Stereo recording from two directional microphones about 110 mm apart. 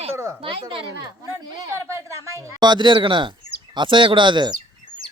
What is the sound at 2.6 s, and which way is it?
Speech, 45° right (ahead or behind).